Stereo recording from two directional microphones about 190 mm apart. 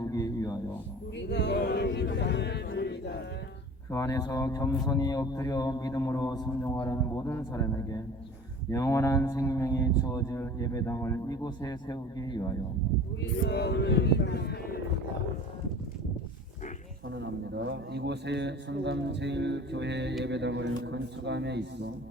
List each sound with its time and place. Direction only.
0.0 s music: 20° left (ahead or behind)
1.3 s a sound: 65° left (ahead or behind)
3.9 s a man's voice: 20° left (ahead or behind)
13.5 s speech: 65° left (ahead or behind)
17.2 s a man's voice: 65° right (ahead or behind)